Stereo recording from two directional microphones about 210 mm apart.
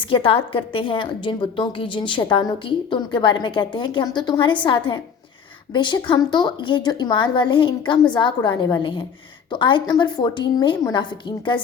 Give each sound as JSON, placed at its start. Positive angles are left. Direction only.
{"t": 0.0, "sound": "a woman's voice", "side_deg": 25}